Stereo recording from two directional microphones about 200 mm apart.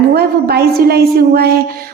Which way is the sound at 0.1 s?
50° right (ahead or behind).